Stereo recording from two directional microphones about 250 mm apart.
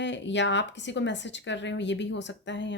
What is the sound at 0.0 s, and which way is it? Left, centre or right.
A woman's voice, left.